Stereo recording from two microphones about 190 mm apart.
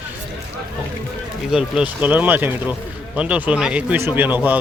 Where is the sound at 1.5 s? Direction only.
5° right (ahead or behind).